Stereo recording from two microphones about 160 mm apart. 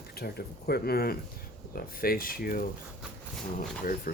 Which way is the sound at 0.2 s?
75° left (ahead or behind).